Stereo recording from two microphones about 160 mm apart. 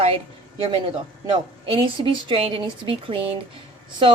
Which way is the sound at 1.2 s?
30° right (ahead or behind).